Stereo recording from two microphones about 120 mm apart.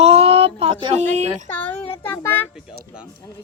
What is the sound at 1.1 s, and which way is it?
Speech, 70° right (ahead or behind).